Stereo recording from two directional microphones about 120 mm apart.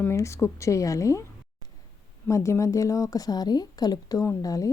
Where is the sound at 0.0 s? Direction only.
25° left (ahead or behind).